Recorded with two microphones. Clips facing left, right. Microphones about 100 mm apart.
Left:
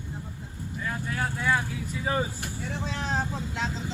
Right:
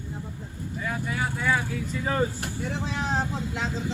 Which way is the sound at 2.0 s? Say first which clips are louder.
Right 2 dB; 5° left (ahead or behind).